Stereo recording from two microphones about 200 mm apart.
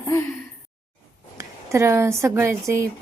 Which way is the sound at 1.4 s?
15° right (ahead or behind).